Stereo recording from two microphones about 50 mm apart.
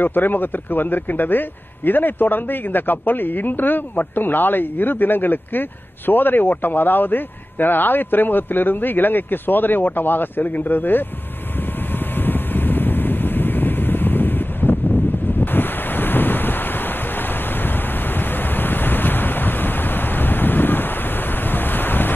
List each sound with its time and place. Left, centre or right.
0.0 s speech: left
12.3 s wind: left
18.6 s waves: left